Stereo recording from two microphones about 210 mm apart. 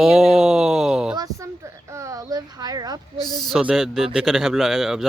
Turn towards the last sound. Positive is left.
turn(degrees=0)  # may be behind; listen again after turning